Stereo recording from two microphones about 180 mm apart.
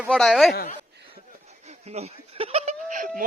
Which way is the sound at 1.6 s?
35° right (ahead or behind).